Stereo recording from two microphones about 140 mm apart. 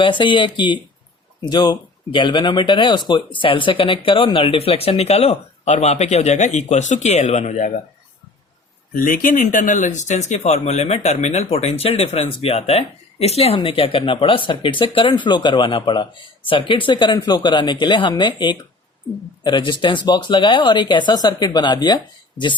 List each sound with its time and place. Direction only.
0.0 s speech: 35° left (ahead or behind); by 7.7 s 55° left (ahead or behind)
8.9 s speech: 80° left; by 22.5 s 30° left (ahead or behind)